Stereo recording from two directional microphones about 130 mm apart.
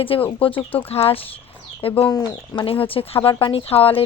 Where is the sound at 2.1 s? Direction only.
30° left (ahead or behind); by 4.0 s 45° left (ahead or behind).